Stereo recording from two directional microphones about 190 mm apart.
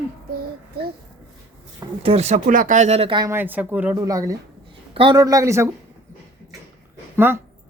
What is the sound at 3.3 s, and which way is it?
A man's voice, 10° right (ahead or behind).